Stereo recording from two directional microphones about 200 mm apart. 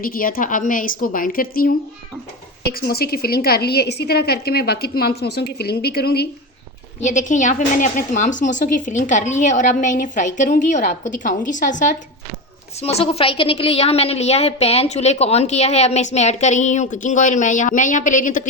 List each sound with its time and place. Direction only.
0.0 s a woman's voice: 45° left (ahead or behind)
7.0 s a woman's voice: 40° left (ahead or behind)